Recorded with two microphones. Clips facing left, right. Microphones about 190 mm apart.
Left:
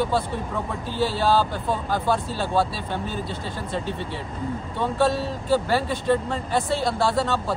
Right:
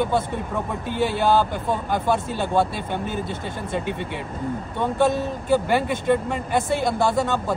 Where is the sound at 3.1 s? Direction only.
55° right (ahead or behind).